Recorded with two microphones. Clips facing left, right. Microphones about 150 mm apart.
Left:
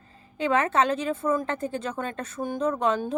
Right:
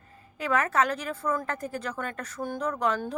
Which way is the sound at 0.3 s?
25° left (ahead or behind).